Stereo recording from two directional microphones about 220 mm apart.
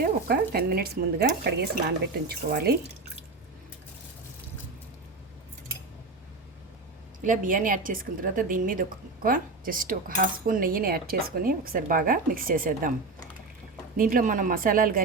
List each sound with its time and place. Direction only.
0.0 s speech: 45° right (ahead or behind)
7.3 s a woman's voice: 35° right (ahead or behind)
13.9 s a woman's voice: 40° right (ahead or behind)